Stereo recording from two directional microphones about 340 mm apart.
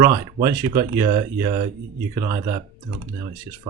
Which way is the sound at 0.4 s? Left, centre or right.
Centre.